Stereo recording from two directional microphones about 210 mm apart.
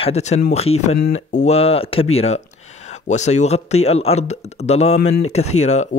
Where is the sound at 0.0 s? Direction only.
30° left (ahead or behind).